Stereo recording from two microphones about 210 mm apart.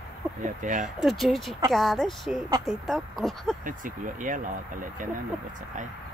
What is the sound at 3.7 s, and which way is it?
Speech, 40° right (ahead or behind).